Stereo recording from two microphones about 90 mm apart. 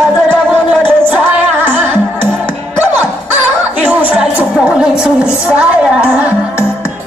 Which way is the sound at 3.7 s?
15° right (ahead or behind).